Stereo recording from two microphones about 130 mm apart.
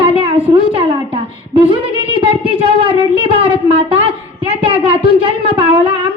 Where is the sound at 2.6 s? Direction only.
45° right (ahead or behind).